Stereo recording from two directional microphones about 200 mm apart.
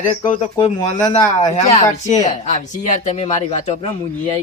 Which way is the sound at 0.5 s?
30° left (ahead or behind).